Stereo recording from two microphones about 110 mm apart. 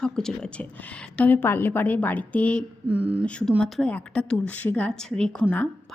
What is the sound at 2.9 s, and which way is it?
Speech, 10° right (ahead or behind).